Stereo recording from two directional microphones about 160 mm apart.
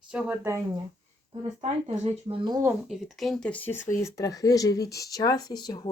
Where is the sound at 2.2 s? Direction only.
30° right (ahead or behind).